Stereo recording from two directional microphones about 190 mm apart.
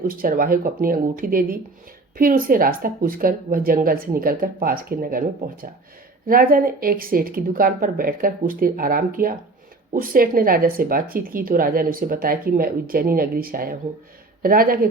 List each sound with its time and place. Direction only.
0.1 s speech: 50° right (ahead or behind)